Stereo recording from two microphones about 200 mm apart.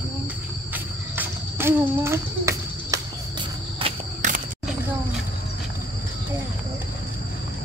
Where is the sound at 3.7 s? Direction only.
30° right (ahead or behind).